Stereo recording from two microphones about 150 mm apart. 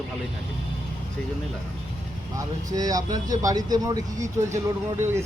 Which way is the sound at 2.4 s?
25° right (ahead or behind).